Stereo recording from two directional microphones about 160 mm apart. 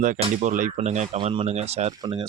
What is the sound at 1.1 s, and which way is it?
Speech, 35° right (ahead or behind).